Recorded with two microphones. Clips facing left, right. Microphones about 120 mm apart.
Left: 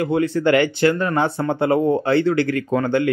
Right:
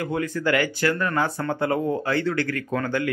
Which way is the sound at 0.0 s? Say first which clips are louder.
Left 7 dB; 25° left (ahead or behind).